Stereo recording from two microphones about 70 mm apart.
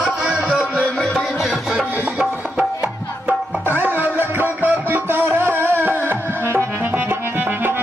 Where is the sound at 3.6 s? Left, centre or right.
Right.